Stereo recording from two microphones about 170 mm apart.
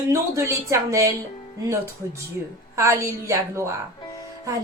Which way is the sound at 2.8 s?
15° right (ahead or behind).